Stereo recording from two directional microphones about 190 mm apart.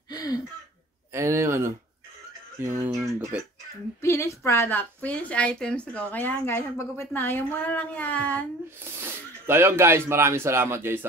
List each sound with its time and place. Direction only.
0.1 s a sound: 20° left (ahead or behind)
1.1 s speech: 15° right (ahead or behind)
4.0 s a woman's voice: 15° left (ahead or behind)
8.9 s speech: 10° right (ahead or behind)